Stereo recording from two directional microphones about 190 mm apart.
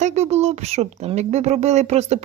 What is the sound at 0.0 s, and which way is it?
Speech, 35° right (ahead or behind).